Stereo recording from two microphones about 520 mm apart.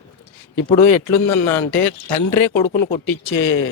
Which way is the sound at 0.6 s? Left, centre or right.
Centre.